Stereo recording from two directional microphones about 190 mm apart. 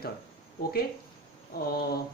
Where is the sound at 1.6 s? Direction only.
55° left (ahead or behind).